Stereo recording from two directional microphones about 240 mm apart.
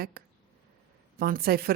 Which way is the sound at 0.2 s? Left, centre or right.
Right.